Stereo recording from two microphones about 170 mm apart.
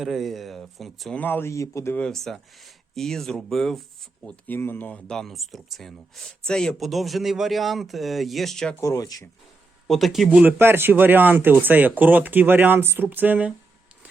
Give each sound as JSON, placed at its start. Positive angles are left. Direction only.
{"t": 0.0, "sound": "speech", "side_deg": 0}
{"t": 8.8, "sound": "speech", "side_deg": 20}
{"t": 9.8, "sound": "speech", "side_deg": 0}